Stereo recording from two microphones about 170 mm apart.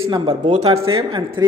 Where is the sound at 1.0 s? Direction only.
25° right (ahead or behind).